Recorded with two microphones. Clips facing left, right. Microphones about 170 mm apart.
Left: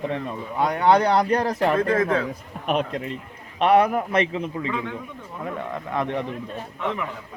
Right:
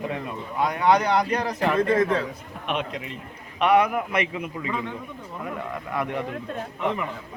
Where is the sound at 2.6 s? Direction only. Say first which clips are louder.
Left 5 dB; 40° left (ahead or behind).